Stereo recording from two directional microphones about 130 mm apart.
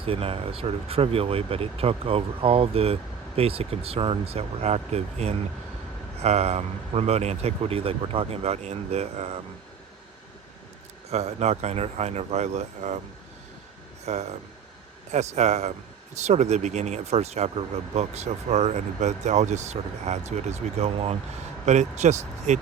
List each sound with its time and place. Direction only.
0.0 s speech: 45° right (ahead or behind)
11.1 s speech: 55° right (ahead or behind)
14.0 s speech: 60° right (ahead or behind)